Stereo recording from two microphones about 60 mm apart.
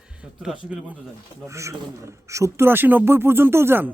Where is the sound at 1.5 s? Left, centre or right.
Right.